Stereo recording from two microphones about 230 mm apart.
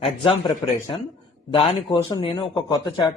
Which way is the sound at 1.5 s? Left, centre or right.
Left.